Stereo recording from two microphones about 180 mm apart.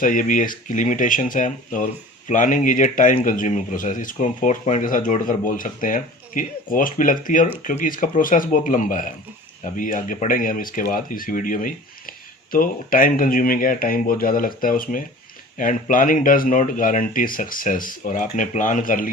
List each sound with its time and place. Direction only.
0.0 s speech: 50° left (ahead or behind)